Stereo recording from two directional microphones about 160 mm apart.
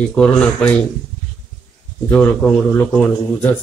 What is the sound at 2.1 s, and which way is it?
Speech, 5° left (ahead or behind).